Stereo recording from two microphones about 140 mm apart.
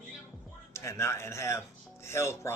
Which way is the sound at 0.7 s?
20° left (ahead or behind).